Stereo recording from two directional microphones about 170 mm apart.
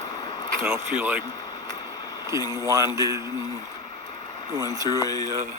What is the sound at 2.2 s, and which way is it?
Speech, 20° right (ahead or behind).